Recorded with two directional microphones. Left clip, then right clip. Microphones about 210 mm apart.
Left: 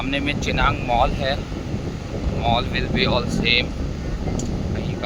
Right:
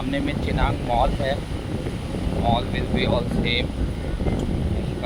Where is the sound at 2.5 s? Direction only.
25° left (ahead or behind).